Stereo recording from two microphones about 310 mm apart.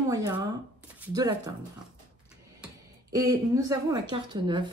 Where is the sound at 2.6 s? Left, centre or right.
Centre.